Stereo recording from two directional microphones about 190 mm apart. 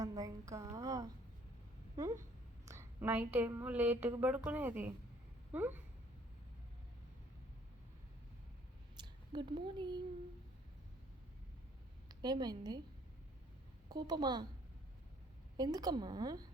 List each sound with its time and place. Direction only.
0.0 s a woman's voice: 20° right (ahead or behind)
2.6 s a woman's voice: 15° right (ahead or behind)
9.0 s speech: 25° right (ahead or behind)
12.0 s a woman's voice: 20° right (ahead or behind)
13.9 s a woman's voice: 20° right (ahead or behind)
15.5 s a woman's voice: 20° right (ahead or behind)